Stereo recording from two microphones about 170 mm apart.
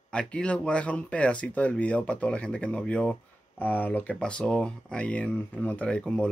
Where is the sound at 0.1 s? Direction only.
5° left (ahead or behind).